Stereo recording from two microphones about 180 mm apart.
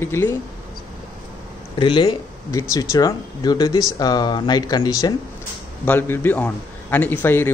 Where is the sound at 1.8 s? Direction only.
25° left (ahead or behind).